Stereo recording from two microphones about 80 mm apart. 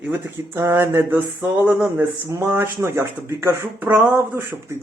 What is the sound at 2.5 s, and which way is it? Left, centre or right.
Speech, right.